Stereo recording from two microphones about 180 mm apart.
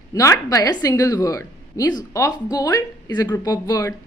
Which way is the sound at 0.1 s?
20° left (ahead or behind).